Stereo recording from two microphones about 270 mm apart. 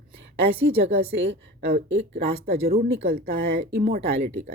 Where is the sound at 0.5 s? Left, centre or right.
Right.